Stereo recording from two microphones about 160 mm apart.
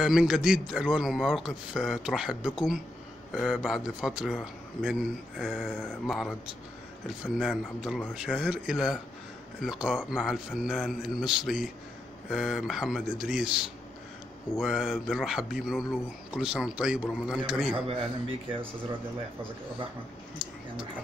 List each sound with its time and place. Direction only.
0.0 s a man's voice: 5° right (ahead or behind)
7.3 s a man's voice: centre (ahead or behind)
17.7 s speech: 35° right (ahead or behind)